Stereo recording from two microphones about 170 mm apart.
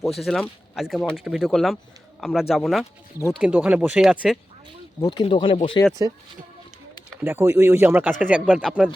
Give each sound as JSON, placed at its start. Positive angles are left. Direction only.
{"t": 0.2, "sound": "speech", "side_deg": 0}
{"t": 4.9, "sound": "speech", "side_deg": 20}
{"t": 7.2, "sound": "speech", "side_deg": -15}